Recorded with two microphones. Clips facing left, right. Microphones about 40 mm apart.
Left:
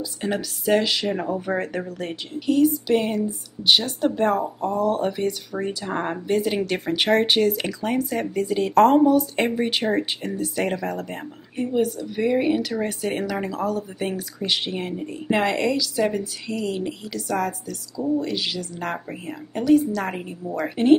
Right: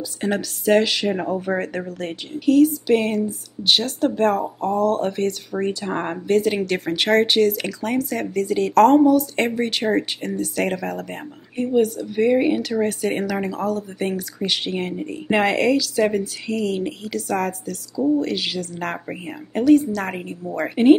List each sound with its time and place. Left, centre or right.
0.2 s speech: centre
19.0 s speech: centre
19.6 s speech: centre
20.7 s speech: centre